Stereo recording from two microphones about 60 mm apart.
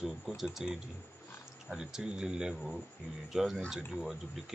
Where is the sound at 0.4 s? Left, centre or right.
Centre.